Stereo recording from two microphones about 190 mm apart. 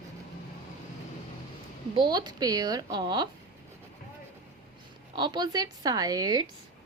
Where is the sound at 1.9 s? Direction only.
25° right (ahead or behind).